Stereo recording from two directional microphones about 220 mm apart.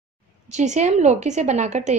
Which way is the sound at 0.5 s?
30° right (ahead or behind).